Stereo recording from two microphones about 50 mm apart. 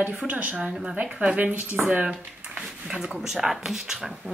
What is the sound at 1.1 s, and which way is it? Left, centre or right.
Speech, right.